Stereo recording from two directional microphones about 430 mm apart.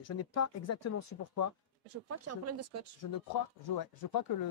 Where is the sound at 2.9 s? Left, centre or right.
Left.